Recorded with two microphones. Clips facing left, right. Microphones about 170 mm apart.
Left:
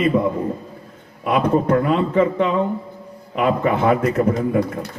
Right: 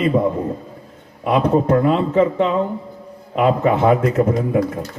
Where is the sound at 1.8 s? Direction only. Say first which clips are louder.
Right 2 dB; 30° right (ahead or behind).